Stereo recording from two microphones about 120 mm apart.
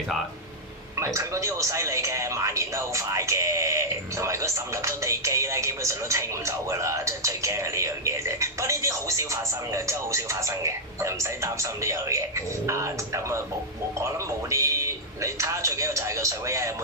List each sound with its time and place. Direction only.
0.9 s a man's voice: 25° right (ahead or behind)